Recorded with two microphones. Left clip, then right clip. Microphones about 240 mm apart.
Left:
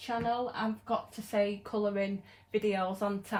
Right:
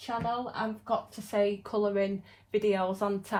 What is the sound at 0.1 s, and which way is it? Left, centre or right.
A woman's voice, right.